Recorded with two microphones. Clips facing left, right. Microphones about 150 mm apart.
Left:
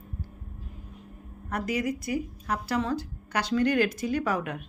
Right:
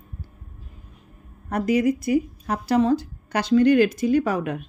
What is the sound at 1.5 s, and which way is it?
Speech, 25° right (ahead or behind).